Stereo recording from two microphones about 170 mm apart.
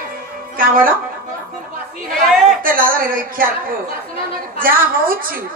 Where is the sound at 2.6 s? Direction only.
55° right (ahead or behind).